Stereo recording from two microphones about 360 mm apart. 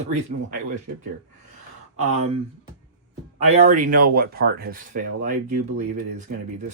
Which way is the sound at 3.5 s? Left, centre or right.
Centre.